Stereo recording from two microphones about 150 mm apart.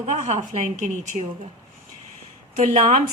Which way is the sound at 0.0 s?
50° right (ahead or behind).